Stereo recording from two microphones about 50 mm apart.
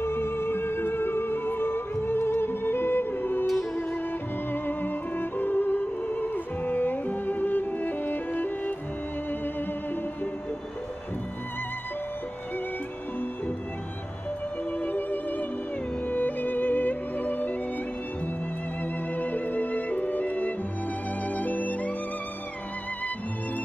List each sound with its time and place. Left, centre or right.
0.0 s music: left
4.5 s music: left
14.8 s music: left
19.1 s music: left